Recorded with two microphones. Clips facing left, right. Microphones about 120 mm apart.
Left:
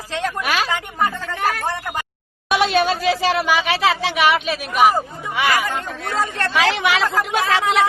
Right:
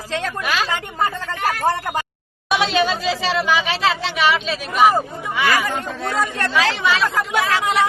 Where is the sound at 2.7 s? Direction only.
55° left (ahead or behind).